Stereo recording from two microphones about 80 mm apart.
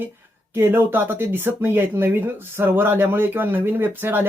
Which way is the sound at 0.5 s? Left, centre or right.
Right.